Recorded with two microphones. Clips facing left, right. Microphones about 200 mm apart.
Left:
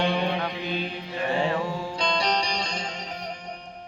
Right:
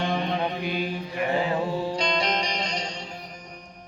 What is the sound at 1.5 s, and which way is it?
Music, 30° right (ahead or behind).